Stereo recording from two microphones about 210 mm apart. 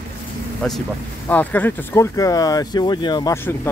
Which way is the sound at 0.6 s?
5° left (ahead or behind).